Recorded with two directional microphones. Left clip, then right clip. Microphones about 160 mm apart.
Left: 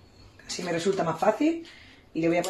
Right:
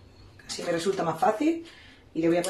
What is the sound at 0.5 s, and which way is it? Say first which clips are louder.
Speech: even; 35° left (ahead or behind).